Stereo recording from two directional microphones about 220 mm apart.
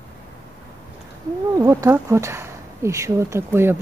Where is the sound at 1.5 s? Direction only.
15° right (ahead or behind).